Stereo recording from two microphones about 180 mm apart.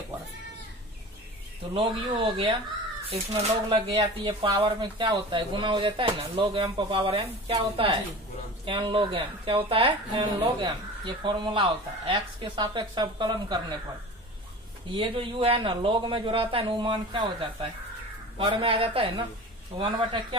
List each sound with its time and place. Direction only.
1.7 s a woman's voice: 25° right (ahead or behind)
3.6 s a woman's voice: 30° right (ahead or behind)
15.0 s a woman's voice: 30° right (ahead or behind)